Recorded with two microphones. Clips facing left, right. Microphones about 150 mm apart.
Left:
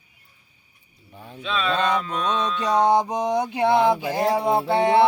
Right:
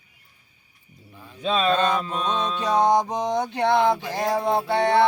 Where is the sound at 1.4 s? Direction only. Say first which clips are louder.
Right 3 dB; 40° right (ahead or behind).